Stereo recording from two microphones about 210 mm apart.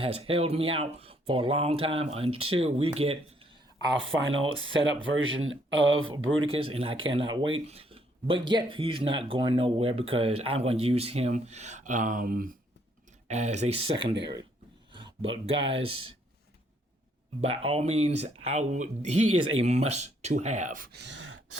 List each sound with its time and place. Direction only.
0.0 s speech: 25° right (ahead or behind)
3.9 s speech: 65° right (ahead or behind)
6.4 s speech: 25° right (ahead or behind)
14.9 s speech: 25° right (ahead or behind)
17.4 s speech: 30° right (ahead or behind)
19.2 s speech: 90° right
19.5 s speech: 30° right (ahead or behind); by 21.6 s 70° right (ahead or behind)